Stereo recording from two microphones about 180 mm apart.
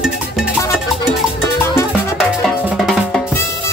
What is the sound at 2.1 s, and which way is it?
Music, centre (ahead or behind).